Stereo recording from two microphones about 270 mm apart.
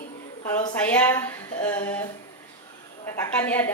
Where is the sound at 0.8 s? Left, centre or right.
Centre.